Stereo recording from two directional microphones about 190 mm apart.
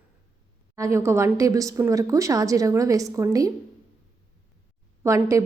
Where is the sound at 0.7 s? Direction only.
15° right (ahead or behind).